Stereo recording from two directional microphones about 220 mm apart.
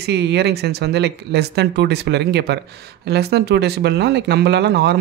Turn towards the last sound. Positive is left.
turn(degrees=-50)  # may be behind; listen again after turning